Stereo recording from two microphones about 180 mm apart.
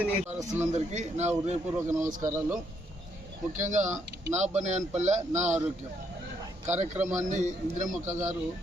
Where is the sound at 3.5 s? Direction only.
45° right (ahead or behind).